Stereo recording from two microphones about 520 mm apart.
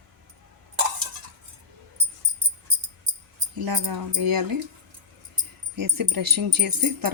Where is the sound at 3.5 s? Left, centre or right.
Right.